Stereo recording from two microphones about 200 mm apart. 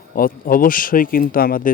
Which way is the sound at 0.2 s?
45° left (ahead or behind).